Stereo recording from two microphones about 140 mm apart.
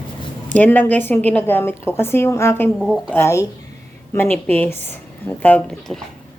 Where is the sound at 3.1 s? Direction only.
20° left (ahead or behind); by 6.0 s 5° left (ahead or behind).